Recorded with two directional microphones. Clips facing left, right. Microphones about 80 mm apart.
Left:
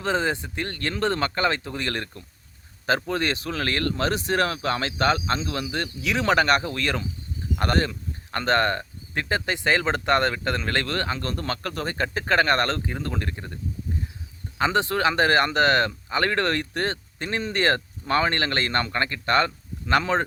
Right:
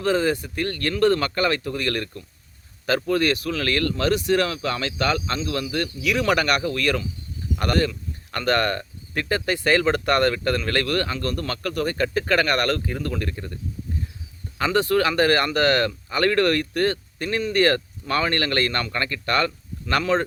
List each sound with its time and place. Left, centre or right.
0.0 s speech: left
14.6 s speech: left